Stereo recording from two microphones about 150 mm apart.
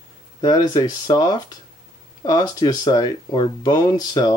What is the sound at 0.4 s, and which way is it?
Speech, 25° left (ahead or behind).